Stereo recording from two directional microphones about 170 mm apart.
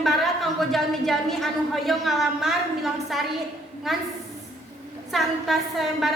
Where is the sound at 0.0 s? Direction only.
Centre (ahead or behind).